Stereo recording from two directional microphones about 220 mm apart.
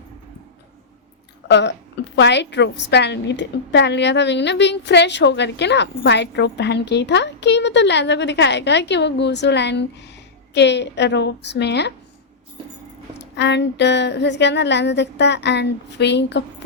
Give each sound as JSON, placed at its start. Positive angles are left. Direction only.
{"t": 1.5, "sound": "a woman's voice", "side_deg": 50}
{"t": 13.1, "sound": "a woman's voice", "side_deg": 50}